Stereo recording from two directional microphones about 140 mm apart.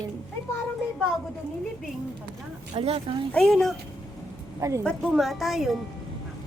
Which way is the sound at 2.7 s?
50° right (ahead or behind).